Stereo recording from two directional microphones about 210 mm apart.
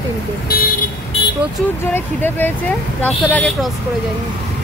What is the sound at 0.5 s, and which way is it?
Speech, 45° left (ahead or behind).